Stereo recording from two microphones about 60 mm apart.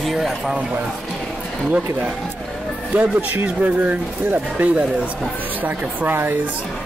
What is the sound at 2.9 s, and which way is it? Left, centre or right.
Speech, right.